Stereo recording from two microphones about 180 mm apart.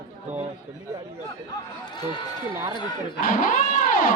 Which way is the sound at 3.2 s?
50° left (ahead or behind).